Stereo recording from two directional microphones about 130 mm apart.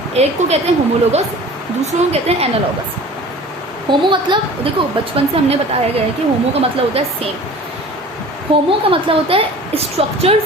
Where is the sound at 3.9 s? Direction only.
35° right (ahead or behind).